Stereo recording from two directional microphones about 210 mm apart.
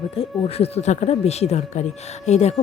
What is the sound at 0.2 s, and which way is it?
Speech, 30° left (ahead or behind).